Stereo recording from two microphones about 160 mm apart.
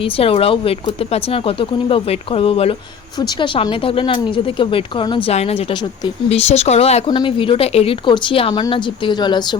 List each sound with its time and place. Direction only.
0.0 s speech: 35° left (ahead or behind)
7.1 s speech: 30° left (ahead or behind)